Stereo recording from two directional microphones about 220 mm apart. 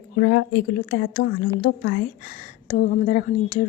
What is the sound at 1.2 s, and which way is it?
A woman's voice, 50° left (ahead or behind).